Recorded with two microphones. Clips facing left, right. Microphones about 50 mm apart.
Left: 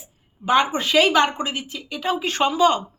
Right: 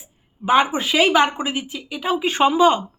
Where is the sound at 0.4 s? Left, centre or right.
Centre.